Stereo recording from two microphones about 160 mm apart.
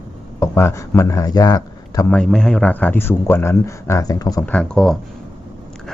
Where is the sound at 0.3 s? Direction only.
15° left (ahead or behind).